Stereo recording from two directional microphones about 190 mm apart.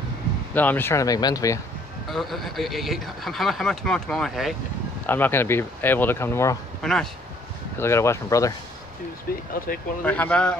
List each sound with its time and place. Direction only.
0.6 s speech: 10° left (ahead or behind)
2.0 s speech: centre (ahead or behind)
6.8 s speech: 5° left (ahead or behind)
7.8 s speech: 15° left (ahead or behind)
9.3 s speech: 50° left (ahead or behind)
10.0 s speech: 10° left (ahead or behind)